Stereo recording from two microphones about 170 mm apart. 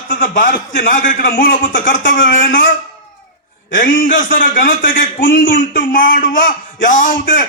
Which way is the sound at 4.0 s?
55° left (ahead or behind).